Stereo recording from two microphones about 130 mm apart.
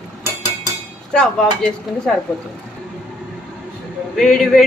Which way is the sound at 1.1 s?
5° left (ahead or behind).